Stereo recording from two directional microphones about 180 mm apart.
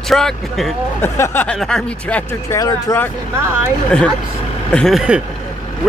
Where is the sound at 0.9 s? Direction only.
15° left (ahead or behind).